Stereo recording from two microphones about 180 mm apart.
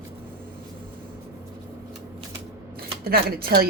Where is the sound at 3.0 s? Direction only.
60° right (ahead or behind).